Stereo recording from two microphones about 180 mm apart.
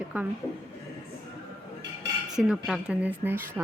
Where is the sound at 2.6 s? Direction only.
5° right (ahead or behind).